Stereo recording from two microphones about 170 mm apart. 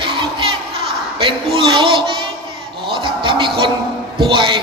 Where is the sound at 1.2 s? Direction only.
30° right (ahead or behind).